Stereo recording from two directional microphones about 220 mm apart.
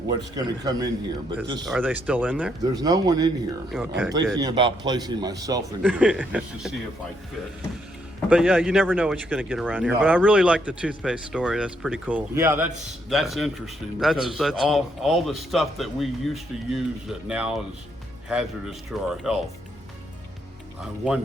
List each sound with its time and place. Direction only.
0.1 s a man's voice: 15° right (ahead or behind)
1.6 s a man's voice: 5° right (ahead or behind)
3.7 s speech: 5° right (ahead or behind)
4.4 s a man's voice: 20° right (ahead or behind); by 6.7 s 5° right (ahead or behind)
8.3 s speech: 5° right (ahead or behind)